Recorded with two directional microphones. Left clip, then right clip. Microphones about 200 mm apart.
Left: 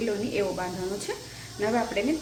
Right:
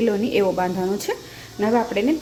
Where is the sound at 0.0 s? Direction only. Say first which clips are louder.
Right 8 dB; 45° right (ahead or behind).